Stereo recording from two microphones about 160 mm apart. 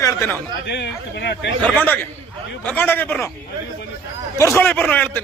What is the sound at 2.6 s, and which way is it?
Speech, 10° left (ahead or behind).